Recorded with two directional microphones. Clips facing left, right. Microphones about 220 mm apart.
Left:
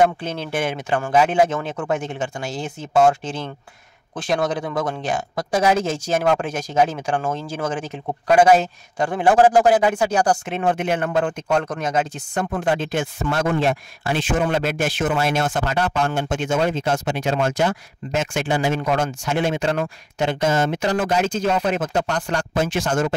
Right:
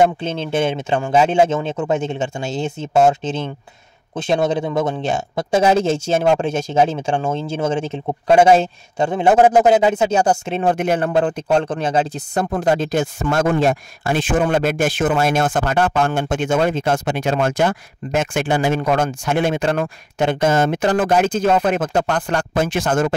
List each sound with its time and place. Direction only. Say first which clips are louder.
0.0 s speech: right 2 dB; 25° right (ahead or behind); by 23.1 s 55° right (ahead or behind)